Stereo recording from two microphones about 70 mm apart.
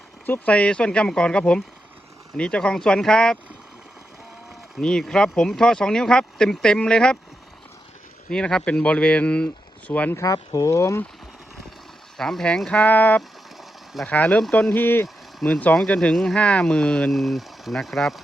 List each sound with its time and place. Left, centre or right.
0.3 s speech: centre
4.8 s speech: centre
8.3 s speech: centre
10.2 s speech: left
12.1 s speech: centre
12.8 s speech: left
13.6 s a sound: centre
14.1 s speech: centre
15.4 s speech: centre
17.1 s speech: centre